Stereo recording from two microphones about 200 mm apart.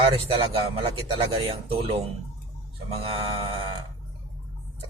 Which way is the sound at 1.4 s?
30° right (ahead or behind).